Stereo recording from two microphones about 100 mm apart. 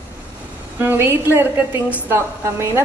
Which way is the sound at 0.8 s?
25° right (ahead or behind).